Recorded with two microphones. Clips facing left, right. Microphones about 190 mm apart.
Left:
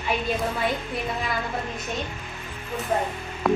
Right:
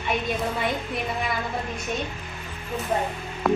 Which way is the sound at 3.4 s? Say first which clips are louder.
Even; centre (ahead or behind).